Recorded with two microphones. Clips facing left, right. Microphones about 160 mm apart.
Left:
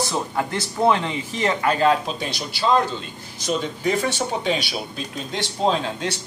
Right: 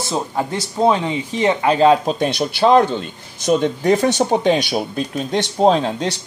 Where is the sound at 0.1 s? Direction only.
20° right (ahead or behind).